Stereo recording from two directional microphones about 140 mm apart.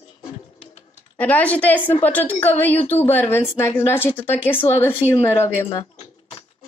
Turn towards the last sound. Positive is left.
turn(degrees=45)  # may be behind; listen again after turning